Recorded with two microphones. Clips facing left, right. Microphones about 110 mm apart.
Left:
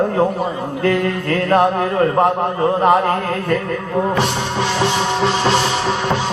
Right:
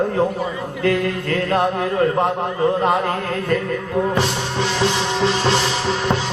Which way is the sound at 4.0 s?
30° left (ahead or behind).